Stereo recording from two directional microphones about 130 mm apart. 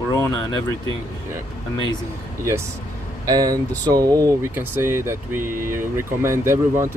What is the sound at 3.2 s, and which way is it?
Speech, 30° right (ahead or behind).